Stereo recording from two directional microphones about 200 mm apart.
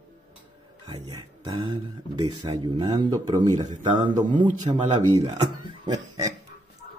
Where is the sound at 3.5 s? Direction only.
35° right (ahead or behind).